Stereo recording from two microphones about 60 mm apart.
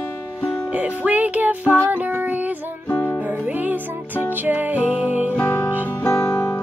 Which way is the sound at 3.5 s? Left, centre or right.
Right.